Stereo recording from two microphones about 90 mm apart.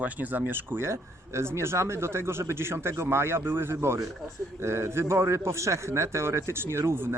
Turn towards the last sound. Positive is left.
turn(degrees=-25)  # may be behind; listen again after turning